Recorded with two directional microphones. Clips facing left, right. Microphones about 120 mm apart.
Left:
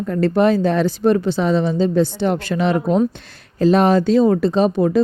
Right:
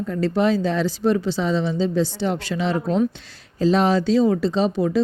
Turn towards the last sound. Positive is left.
turn(degrees=50)  # may be behind; listen again after turning